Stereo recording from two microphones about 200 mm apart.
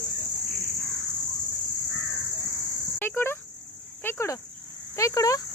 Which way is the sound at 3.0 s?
10° left (ahead or behind).